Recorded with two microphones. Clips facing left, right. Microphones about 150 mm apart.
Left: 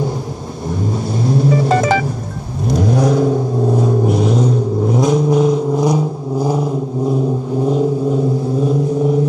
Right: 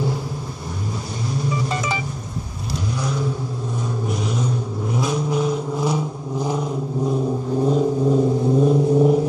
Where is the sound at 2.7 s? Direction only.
55° left (ahead or behind).